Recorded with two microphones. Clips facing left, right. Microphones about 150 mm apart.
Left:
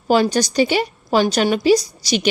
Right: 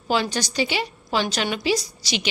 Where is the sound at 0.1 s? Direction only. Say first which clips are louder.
Left 8 dB; 45° left (ahead or behind).